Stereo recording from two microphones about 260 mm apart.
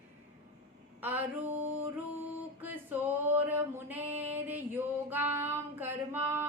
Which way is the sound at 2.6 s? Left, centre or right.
Centre.